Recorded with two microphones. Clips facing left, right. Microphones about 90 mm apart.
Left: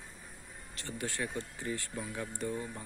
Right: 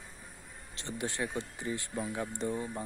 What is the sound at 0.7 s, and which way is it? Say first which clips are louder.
Speech: right 2 dB; 20° right (ahead or behind).